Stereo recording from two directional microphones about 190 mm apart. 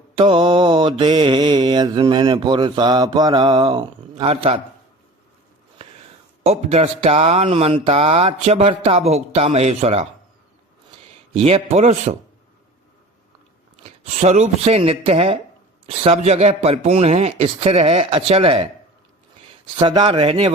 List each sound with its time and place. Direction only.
0.2 s mantra: 25° right (ahead or behind)
6.4 s speech: 35° right (ahead or behind)
11.3 s speech: 30° right (ahead or behind)
14.0 s speech: 35° right (ahead or behind)
19.8 s mantra: 25° right (ahead or behind)